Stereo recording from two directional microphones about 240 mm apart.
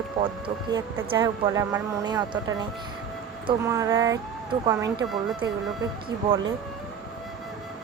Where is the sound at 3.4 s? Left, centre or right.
Centre.